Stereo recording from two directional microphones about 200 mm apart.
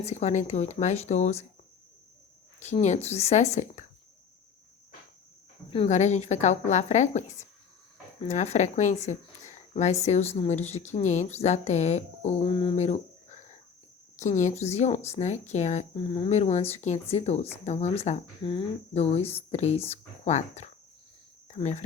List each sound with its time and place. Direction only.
0.0 s speech: 35° left (ahead or behind)
2.6 s speech: 35° left (ahead or behind)
5.7 s speech: 30° left (ahead or behind)
21.4 s cricket: 35° left (ahead or behind)